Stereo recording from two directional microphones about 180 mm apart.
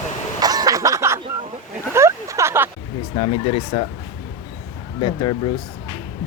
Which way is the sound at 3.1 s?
25° left (ahead or behind).